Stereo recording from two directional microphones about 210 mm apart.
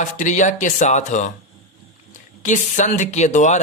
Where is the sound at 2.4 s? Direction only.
35° left (ahead or behind).